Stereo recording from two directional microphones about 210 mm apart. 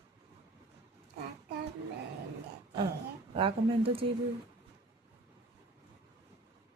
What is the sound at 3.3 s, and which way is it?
Speech, 25° right (ahead or behind).